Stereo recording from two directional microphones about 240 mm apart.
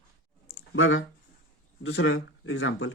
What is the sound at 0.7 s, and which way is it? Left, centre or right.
Speech, left.